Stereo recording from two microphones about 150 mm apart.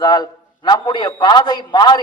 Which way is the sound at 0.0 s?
30° left (ahead or behind).